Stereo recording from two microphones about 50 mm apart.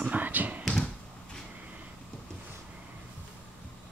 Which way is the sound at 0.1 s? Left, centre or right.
Right.